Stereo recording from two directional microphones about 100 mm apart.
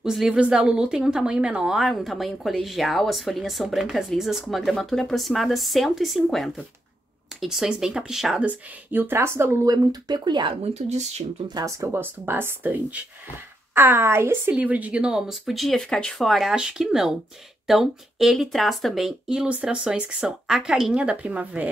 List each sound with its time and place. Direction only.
0.0 s a woman's voice: 5° right (ahead or behind)
8.5 s speech: 20° right (ahead or behind)
9.7 s speech: 45° right (ahead or behind)
10.5 s speech: 90° right
11.4 s speech: 40° right (ahead or behind)
11.9 s a woman's voice: 20° right (ahead or behind)